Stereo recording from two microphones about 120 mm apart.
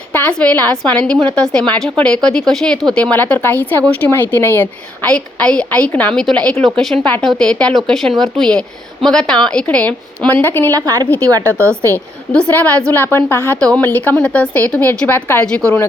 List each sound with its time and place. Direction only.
0.1 s a woman's voice: 15° left (ahead or behind)
10.7 s a woman's voice: 30° right (ahead or behind)
12.3 s a woman's voice: 10° left (ahead or behind)